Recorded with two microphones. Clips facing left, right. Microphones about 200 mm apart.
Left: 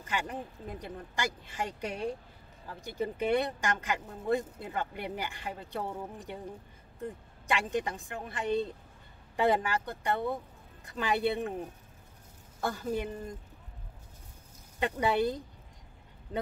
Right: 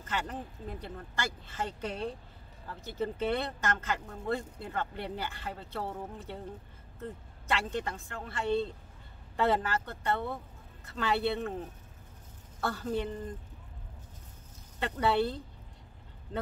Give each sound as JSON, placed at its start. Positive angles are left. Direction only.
{"t": 0.0, "sound": "speech", "side_deg": 10}
{"t": 14.8, "sound": "speech", "side_deg": 15}